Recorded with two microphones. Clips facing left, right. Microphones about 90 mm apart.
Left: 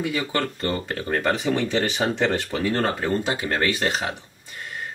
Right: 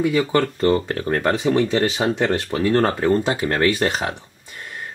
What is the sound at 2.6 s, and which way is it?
Speech, 35° right (ahead or behind).